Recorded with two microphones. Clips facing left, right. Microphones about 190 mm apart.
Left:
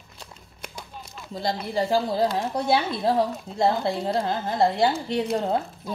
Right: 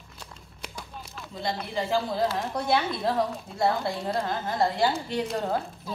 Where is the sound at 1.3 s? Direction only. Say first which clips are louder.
Left 4 dB; 35° left (ahead or behind).